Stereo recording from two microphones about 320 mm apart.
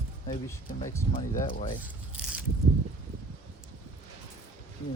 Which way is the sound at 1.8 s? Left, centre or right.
Centre.